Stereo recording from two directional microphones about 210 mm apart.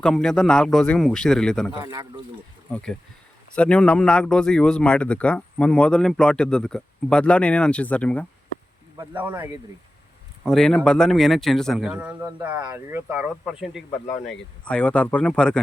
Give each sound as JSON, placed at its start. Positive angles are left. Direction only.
{"t": 0.0, "sound": "speech", "side_deg": 5}
{"t": 1.8, "sound": "speech", "side_deg": -15}
{"t": 2.7, "sound": "speech", "side_deg": 5}
{"t": 9.0, "sound": "speech", "side_deg": -10}
{"t": 10.4, "sound": "speech", "side_deg": 0}